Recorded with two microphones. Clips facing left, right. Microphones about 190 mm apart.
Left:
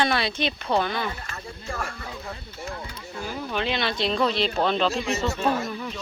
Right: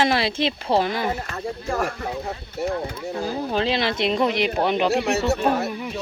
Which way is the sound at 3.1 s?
35° right (ahead or behind).